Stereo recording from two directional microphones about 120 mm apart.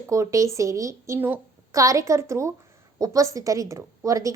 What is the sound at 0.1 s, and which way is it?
A woman's voice, 25° right (ahead or behind).